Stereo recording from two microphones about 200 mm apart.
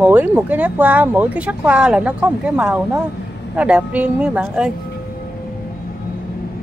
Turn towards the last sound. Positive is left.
turn(degrees=-5)  # may be behind; listen again after turning